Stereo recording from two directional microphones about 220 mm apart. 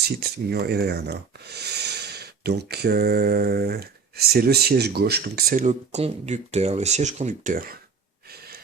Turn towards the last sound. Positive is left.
turn(degrees=-40)  # may be behind; listen again after turning